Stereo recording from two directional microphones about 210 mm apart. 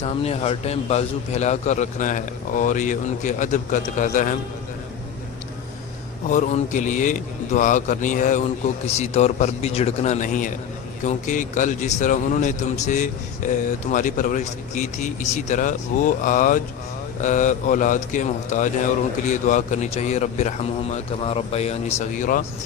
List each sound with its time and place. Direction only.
0.0 s a man's voice: 30° left (ahead or behind)
6.3 s a man's voice: 35° left (ahead or behind)